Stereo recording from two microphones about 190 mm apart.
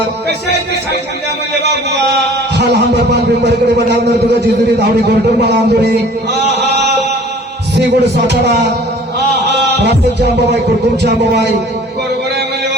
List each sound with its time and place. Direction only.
0.3 s speech: 60° right (ahead or behind)
2.6 s speech: 60° right (ahead or behind)
6.5 s chant: 60° right (ahead or behind)
7.8 s speech: 65° right (ahead or behind)
9.7 s speech: 60° right (ahead or behind)